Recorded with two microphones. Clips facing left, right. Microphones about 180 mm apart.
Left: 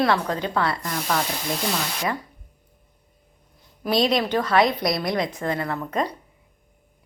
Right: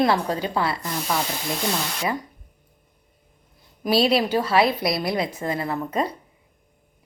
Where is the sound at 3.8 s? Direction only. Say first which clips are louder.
Right 1 dB; 5° right (ahead or behind).